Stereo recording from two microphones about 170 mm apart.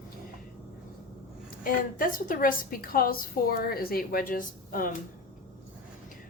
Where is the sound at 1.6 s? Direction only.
55° left (ahead or behind).